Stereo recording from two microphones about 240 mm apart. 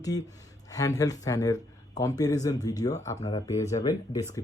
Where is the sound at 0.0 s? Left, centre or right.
Centre.